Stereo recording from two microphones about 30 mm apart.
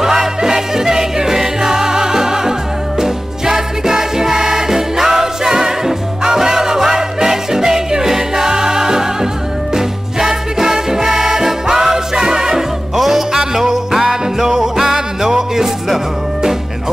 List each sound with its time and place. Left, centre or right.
0.0 s music: centre
12.9 s music: centre
13.3 s music: centre